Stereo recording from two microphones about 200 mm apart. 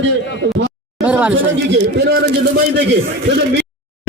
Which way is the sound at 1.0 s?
5° right (ahead or behind).